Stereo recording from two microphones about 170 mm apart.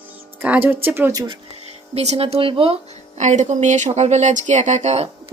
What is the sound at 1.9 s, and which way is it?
Speech, 40° right (ahead or behind).